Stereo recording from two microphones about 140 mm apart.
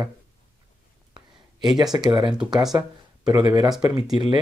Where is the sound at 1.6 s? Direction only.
30° right (ahead or behind).